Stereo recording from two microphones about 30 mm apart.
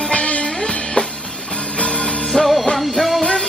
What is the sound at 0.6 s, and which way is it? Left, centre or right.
Music, left.